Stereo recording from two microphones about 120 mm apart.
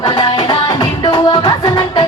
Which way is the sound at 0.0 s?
45° left (ahead or behind).